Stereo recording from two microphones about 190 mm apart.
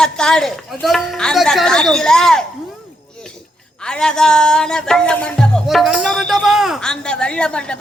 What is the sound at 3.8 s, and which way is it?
Speech, 5° left (ahead or behind).